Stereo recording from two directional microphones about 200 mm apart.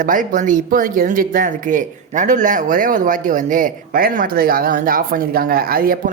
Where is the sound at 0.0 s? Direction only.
40° right (ahead or behind).